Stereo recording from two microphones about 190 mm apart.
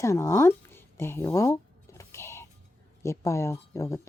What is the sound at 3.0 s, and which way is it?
Speech, 15° left (ahead or behind).